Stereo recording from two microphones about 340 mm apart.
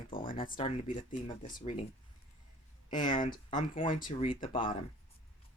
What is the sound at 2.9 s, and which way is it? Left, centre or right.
Speech, centre.